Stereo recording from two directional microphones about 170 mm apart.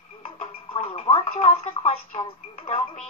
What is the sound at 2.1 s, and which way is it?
Speech, 35° left (ahead or behind).